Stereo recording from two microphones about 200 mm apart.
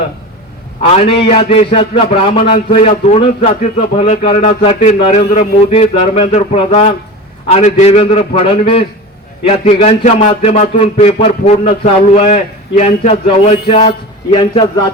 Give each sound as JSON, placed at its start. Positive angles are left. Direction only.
{"t": 0.8, "sound": "a man's voice", "side_deg": 30}